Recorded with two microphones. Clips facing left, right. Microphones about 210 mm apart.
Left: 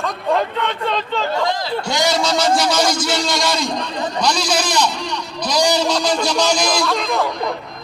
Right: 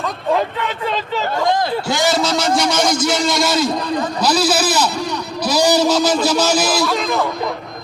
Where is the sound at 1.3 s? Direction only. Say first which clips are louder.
Right 6 dB; 50° right (ahead or behind).